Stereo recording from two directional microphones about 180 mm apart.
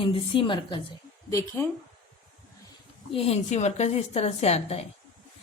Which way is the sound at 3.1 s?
35° left (ahead or behind).